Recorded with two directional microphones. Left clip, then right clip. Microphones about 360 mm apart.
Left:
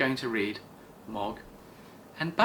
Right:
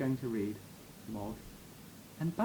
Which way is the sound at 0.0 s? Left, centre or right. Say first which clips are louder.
Left 8 dB; centre.